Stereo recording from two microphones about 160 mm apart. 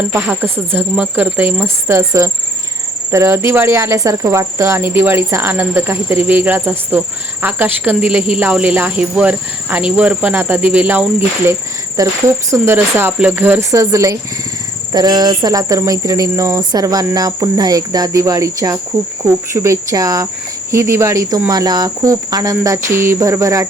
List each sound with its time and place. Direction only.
0.1 s cricket: 10° right (ahead or behind)
12.0 s speech: 20° right (ahead or behind)
12.5 s cricket: 15° right (ahead or behind)
14.9 s speech: 25° right (ahead or behind)